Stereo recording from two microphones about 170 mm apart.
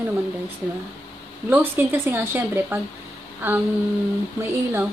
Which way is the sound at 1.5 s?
10° right (ahead or behind).